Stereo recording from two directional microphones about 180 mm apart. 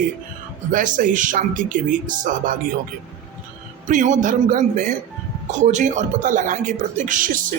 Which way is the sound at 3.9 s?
45° right (ahead or behind).